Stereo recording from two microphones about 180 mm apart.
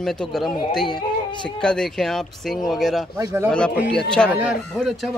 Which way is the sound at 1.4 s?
5° left (ahead or behind).